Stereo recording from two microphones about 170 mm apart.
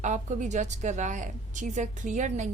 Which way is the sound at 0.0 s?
45° right (ahead or behind).